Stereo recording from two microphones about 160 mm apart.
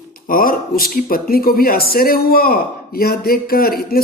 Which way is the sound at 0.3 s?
60° left (ahead or behind).